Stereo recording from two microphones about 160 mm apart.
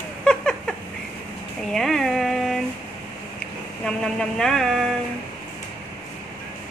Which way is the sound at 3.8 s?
5° left (ahead or behind).